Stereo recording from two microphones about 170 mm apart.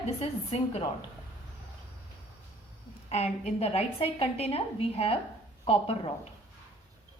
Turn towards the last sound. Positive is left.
turn(degrees=35)  # may be behind; listen again after turning